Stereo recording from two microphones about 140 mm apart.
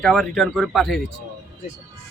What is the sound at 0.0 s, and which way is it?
Speech, centre (ahead or behind).